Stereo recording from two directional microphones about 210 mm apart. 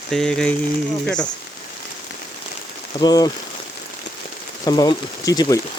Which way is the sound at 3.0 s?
20° left (ahead or behind).